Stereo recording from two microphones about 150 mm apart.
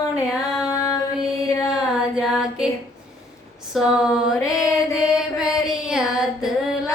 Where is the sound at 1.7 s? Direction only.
5° right (ahead or behind).